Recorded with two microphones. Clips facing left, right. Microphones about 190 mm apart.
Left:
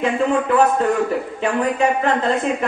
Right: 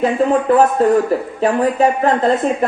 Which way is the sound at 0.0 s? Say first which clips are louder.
Right 4 dB; 40° right (ahead or behind).